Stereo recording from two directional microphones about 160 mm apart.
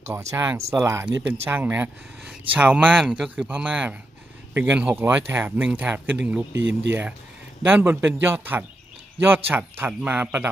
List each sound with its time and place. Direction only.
0.1 s speech: 15° right (ahead or behind)